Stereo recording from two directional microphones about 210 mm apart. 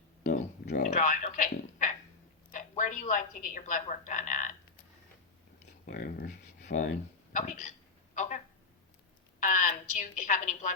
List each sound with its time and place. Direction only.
0.2 s a sound: 35° left (ahead or behind)
0.7 s a woman's voice: 35° left (ahead or behind)
5.8 s speech: 40° left (ahead or behind)
9.4 s a woman's voice: 40° left (ahead or behind)